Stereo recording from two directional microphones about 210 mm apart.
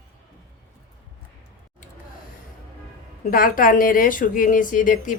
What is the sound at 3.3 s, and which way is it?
A woman's voice, 40° left (ahead or behind).